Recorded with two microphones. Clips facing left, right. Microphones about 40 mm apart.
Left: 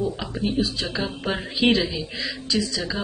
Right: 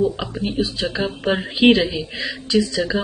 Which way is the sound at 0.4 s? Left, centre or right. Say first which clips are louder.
Right 1 dB; right.